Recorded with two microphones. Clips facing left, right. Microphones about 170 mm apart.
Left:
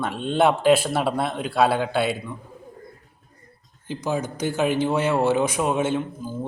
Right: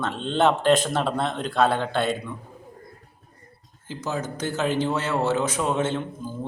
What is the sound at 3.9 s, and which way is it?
Speech, 15° left (ahead or behind).